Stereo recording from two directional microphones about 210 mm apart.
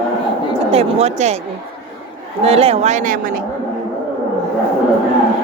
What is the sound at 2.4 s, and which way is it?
Speech, 30° right (ahead or behind).